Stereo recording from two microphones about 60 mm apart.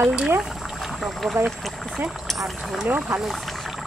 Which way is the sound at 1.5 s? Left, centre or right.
Centre.